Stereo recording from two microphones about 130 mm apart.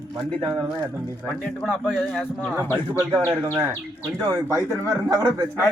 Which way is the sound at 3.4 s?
25° right (ahead or behind).